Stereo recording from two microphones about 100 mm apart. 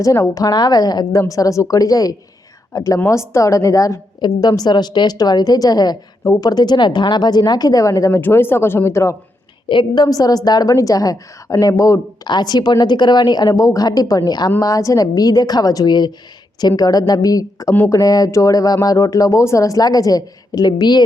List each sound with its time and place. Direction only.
0.0 s a woman's voice: 35° left (ahead or behind)
9.6 s a woman's voice: 50° left (ahead or behind); by 12.3 s 30° left (ahead or behind)
12.3 s a woman's voice: 45° left (ahead or behind)